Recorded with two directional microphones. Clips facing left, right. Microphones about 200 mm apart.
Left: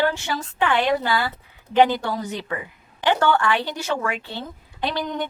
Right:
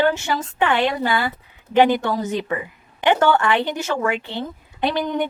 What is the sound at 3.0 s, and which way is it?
A woman's voice, 20° right (ahead or behind).